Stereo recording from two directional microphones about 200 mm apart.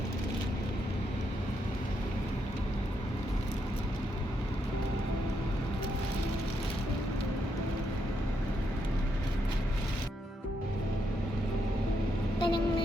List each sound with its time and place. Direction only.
12.4 s vehicle: 25° left (ahead or behind)